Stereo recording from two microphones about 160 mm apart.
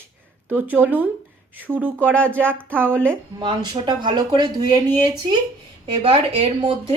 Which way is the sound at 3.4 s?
30° right (ahead or behind).